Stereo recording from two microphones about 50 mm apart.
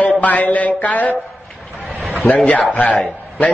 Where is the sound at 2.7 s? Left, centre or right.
Left.